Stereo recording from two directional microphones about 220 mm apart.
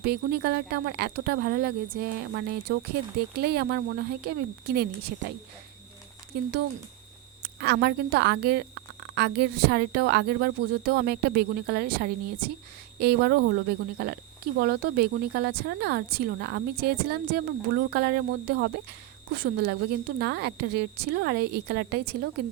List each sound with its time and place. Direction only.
0.0 s speech: 45° right (ahead or behind)
7.4 s speech: 45° right (ahead or behind)